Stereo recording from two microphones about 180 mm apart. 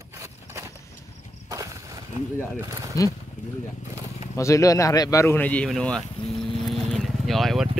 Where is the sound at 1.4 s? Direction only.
20° right (ahead or behind).